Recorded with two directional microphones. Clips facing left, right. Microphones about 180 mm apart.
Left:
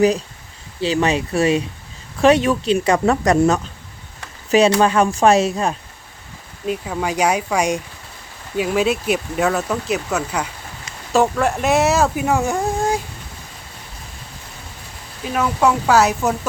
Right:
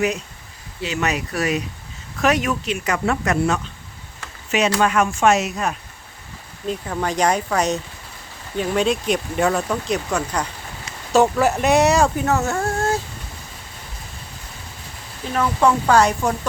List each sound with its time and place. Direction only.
0.8 s speech: 30° left (ahead or behind)
6.7 s speech: 10° left (ahead or behind)
15.3 s speech: 5° left (ahead or behind)